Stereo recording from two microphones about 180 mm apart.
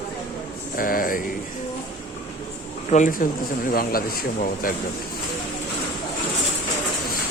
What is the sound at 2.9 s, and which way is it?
Speech, 45° left (ahead or behind).